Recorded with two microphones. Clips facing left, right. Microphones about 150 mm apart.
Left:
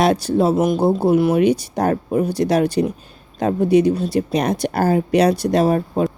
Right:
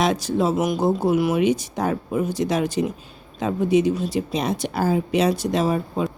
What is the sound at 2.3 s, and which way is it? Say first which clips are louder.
Speech: left 5 dB; 65° left (ahead or behind).